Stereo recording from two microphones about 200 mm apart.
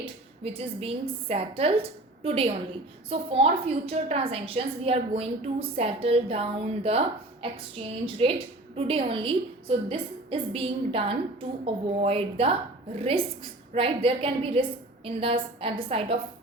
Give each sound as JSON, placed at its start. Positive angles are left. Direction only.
{"t": 0.4, "sound": "a woman's voice", "side_deg": -30}
{"t": 8.0, "sound": "a woman's voice", "side_deg": -25}